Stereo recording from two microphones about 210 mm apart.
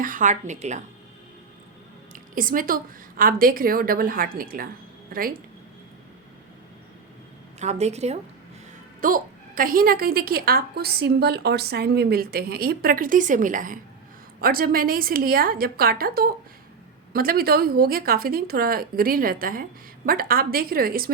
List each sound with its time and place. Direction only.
0.0 s a woman's voice: 40° right (ahead or behind)
2.1 s a woman's voice: 40° right (ahead or behind)
7.6 s a woman's voice: 30° right (ahead or behind)